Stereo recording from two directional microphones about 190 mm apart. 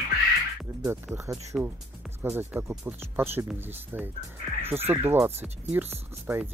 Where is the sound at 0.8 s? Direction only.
15° right (ahead or behind).